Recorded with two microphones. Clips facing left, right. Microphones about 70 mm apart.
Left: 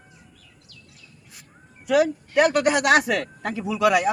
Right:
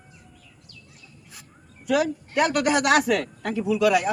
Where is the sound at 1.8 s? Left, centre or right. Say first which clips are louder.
Left 3 dB; left.